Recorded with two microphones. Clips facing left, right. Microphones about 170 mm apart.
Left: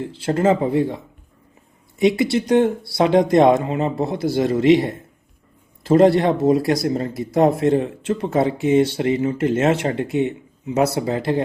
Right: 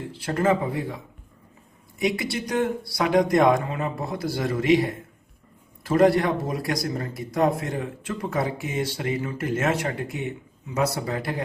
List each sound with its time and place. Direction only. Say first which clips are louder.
0.0 s speech: left 5 dB; 25° left (ahead or behind)
2.0 s speech: left 9 dB; 25° left (ahead or behind)